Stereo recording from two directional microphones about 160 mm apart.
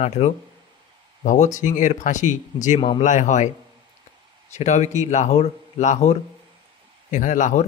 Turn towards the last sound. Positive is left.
turn(degrees=50)  # may be behind; listen again after turning